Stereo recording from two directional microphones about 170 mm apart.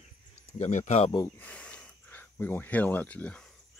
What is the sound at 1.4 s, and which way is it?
Speech, 5° left (ahead or behind).